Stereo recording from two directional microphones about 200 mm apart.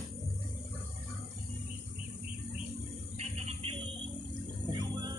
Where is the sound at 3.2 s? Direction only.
30° right (ahead or behind).